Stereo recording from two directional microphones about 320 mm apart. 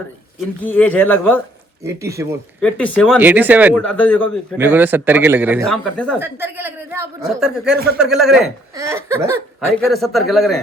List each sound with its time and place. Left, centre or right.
0.6 s speech: centre
2.0 s speech: centre
2.6 s speech: centre
4.5 s speech: centre